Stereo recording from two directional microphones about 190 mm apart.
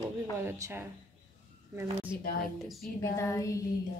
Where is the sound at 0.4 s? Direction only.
15° right (ahead or behind).